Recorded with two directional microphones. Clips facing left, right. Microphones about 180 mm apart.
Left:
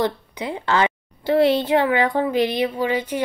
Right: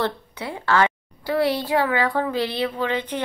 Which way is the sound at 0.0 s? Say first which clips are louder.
Left 3 dB; 15° left (ahead or behind).